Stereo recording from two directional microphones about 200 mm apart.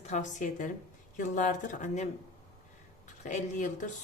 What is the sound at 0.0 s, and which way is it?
Speech, 35° left (ahead or behind).